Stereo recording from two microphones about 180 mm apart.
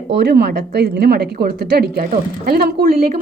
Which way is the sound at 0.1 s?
70° right (ahead or behind).